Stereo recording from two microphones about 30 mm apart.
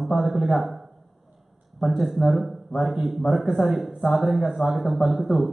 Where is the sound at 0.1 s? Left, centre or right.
Centre.